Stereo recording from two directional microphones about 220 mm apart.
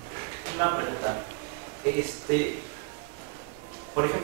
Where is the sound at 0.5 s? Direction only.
20° right (ahead or behind).